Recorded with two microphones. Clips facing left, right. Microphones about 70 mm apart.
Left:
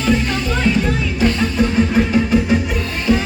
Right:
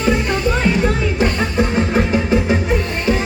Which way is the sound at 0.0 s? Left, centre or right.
Right.